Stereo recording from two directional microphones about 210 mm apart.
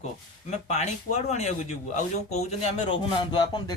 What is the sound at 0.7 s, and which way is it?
Speech, 35° left (ahead or behind).